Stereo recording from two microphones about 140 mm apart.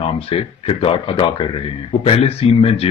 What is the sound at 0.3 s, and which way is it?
Speech, 40° left (ahead or behind).